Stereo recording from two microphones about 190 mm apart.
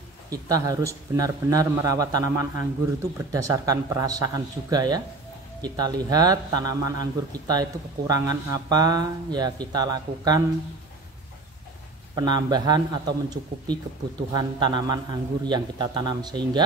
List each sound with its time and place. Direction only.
0.3 s a man's voice: 20° right (ahead or behind)
12.2 s a man's voice: 20° right (ahead or behind)